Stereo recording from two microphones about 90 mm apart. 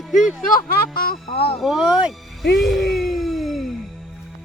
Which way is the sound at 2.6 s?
Centre (ahead or behind).